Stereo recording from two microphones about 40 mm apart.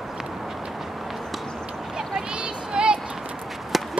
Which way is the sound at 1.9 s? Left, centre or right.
Centre.